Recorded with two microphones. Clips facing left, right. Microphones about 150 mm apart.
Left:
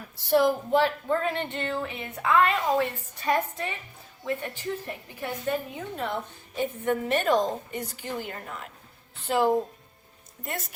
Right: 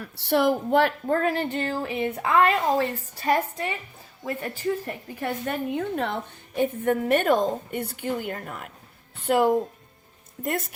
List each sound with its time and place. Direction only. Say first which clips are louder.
0.3 s a woman's voice: right 1 dB; 65° right (ahead or behind); by 5.3 s 40° right (ahead or behind)
5.5 s a woman's voice: right 2 dB; 60° right (ahead or behind)